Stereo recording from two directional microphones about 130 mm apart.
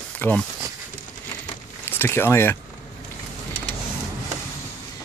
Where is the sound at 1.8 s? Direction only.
15° left (ahead or behind).